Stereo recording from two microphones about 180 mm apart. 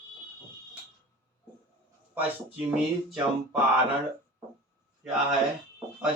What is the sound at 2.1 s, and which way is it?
Speech, 10° right (ahead or behind).